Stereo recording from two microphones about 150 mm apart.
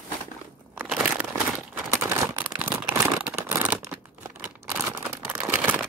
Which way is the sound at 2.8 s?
5° right (ahead or behind).